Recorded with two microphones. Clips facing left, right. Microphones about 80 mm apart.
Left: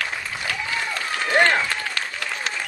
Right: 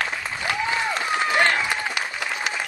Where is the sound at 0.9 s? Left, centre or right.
Centre.